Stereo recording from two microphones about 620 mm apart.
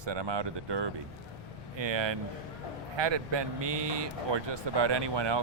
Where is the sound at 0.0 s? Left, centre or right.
Right.